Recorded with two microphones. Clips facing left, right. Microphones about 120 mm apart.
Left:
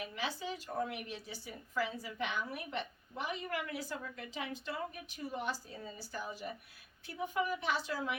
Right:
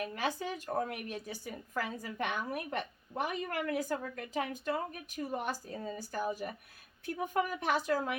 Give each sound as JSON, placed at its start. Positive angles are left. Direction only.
{"t": 0.0, "sound": "a woman's voice", "side_deg": -50}